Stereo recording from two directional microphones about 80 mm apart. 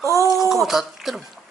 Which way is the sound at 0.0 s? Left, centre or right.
Right.